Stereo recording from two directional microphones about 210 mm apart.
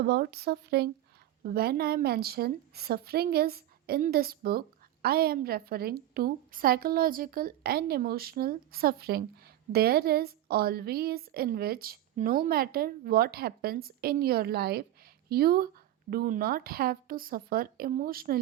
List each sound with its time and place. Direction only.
0.0 s a woman's voice: 50° right (ahead or behind)